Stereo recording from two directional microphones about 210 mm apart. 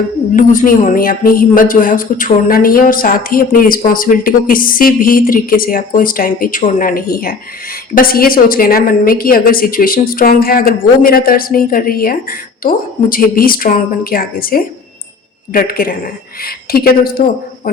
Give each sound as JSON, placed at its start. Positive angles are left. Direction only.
{"t": 0.3, "sound": "a woman's voice", "side_deg": 40}